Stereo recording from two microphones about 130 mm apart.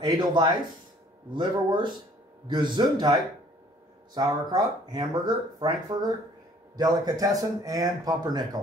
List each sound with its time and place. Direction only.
0.0 s a man's voice: 35° right (ahead or behind)